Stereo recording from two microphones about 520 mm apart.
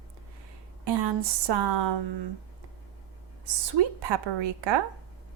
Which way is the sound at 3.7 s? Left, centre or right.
Right.